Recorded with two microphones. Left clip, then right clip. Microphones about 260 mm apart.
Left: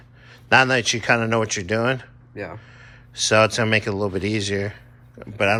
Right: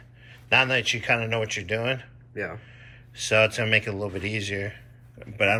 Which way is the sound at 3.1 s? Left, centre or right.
Centre.